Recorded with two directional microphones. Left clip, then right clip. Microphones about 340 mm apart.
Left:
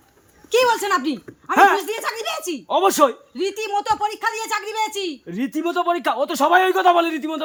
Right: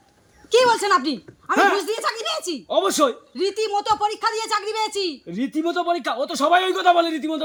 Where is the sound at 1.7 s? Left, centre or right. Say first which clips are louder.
Even; centre.